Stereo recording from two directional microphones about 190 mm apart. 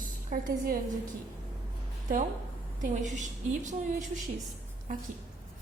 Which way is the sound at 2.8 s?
40° right (ahead or behind).